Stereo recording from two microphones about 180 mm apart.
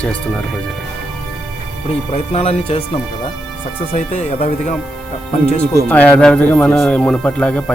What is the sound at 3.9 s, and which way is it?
Speech, 40° left (ahead or behind).